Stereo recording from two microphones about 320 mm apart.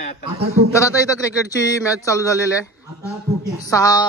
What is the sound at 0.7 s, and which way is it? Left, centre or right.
Speech, centre.